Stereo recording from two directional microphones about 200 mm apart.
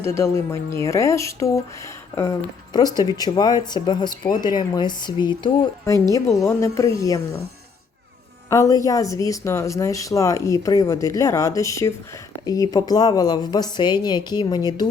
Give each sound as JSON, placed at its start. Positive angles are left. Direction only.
{"t": 0.0, "sound": "speech", "side_deg": 15}
{"t": 8.4, "sound": "speech", "side_deg": 15}